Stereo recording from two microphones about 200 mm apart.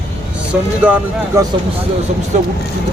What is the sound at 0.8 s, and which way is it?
Speech, 5° right (ahead or behind).